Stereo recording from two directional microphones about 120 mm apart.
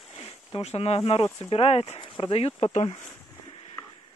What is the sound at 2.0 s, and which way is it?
Speech, 50° left (ahead or behind).